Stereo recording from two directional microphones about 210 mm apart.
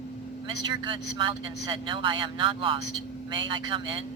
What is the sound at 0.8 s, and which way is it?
Speech, 25° right (ahead or behind).